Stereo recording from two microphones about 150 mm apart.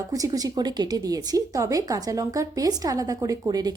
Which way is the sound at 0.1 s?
25° right (ahead or behind).